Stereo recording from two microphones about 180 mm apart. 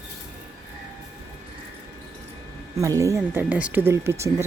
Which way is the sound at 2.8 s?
15° right (ahead or behind).